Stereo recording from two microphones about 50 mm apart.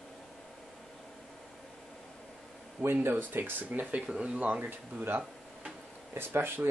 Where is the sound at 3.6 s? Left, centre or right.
Right.